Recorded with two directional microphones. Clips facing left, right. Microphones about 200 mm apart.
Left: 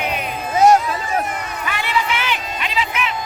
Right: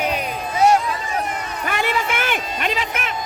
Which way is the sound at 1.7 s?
45° right (ahead or behind).